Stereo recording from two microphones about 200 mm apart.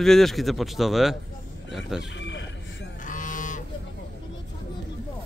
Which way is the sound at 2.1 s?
65° left (ahead or behind).